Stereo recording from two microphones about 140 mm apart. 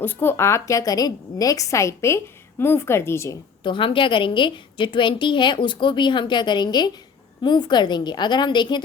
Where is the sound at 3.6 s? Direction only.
35° left (ahead or behind).